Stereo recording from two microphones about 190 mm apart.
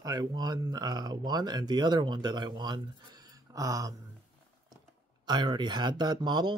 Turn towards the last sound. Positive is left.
turn(degrees=-20)  # may be behind; listen again after turning